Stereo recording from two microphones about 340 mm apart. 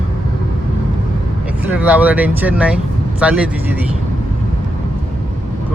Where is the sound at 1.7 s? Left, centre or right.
Centre.